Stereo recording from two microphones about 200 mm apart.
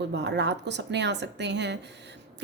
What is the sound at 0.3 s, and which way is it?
A woman's voice, 60° right (ahead or behind).